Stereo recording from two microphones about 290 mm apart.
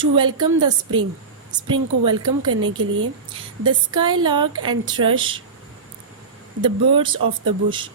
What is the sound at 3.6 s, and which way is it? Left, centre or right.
A woman's voice, centre.